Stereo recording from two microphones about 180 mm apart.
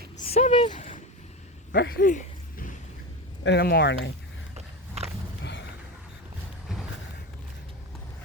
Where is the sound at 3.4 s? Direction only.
60° left (ahead or behind).